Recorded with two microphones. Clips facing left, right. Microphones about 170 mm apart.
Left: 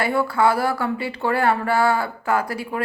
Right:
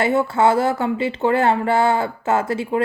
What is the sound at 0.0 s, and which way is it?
Speech, 25° right (ahead or behind).